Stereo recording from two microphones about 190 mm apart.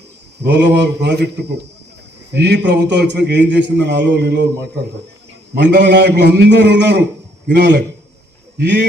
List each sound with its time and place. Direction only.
0.4 s a man's voice: 65° right (ahead or behind)
5.5 s a man's voice: 65° right (ahead or behind)